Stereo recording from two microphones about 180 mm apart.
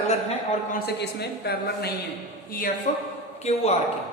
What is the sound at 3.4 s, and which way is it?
Speech, 35° left (ahead or behind).